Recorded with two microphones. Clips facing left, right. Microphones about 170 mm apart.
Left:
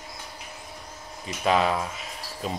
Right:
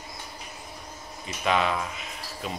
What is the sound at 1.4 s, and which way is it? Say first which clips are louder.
Speech: left 2 dB; 35° left (ahead or behind).